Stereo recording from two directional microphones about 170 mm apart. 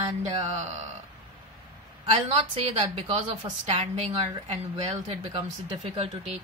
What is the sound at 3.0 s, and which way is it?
A woman's voice, 30° right (ahead or behind).